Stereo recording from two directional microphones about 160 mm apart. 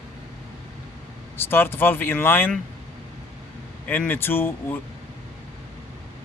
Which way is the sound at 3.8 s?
10° left (ahead or behind).